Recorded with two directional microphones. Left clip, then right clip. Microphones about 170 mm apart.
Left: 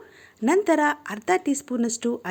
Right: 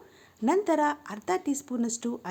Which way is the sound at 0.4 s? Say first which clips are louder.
Left 5 dB; 20° left (ahead or behind).